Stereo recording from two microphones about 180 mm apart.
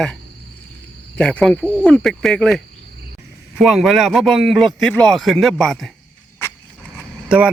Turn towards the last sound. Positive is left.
turn(degrees=-5)  # may be behind; listen again after turning